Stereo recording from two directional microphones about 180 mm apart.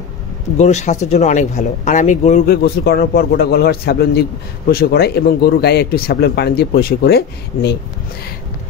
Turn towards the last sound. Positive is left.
turn(degrees=65)  # may be behind; listen again after turning